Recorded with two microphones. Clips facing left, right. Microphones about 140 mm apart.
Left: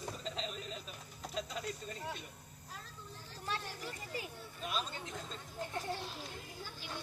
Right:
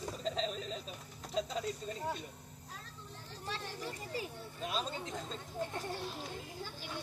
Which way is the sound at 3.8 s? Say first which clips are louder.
Right 3 dB; 35° right (ahead or behind).